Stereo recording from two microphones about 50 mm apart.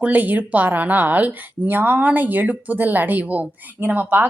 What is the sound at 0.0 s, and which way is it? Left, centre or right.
A woman's voice, right.